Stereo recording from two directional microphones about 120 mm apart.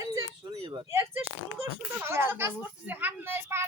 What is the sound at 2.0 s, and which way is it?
Speech, 20° right (ahead or behind).